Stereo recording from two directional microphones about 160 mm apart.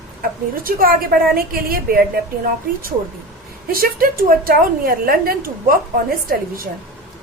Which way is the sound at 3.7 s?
65° right (ahead or behind).